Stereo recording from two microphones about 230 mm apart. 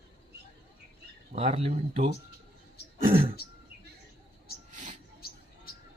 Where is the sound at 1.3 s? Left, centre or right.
Right.